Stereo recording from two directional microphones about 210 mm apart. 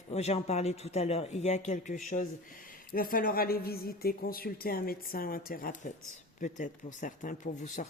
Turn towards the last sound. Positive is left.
turn(degrees=35)  # may be behind; listen again after turning